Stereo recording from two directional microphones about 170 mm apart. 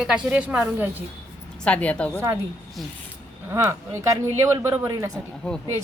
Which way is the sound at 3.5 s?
15° right (ahead or behind).